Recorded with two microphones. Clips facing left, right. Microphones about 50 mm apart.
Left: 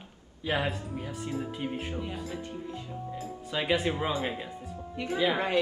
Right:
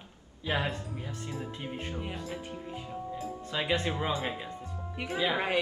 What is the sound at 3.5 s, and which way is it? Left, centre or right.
A man's voice, centre.